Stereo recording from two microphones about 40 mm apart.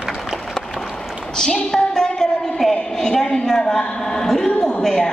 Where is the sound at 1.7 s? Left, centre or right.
Centre.